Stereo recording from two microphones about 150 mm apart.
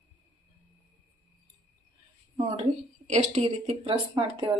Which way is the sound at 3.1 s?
50° right (ahead or behind).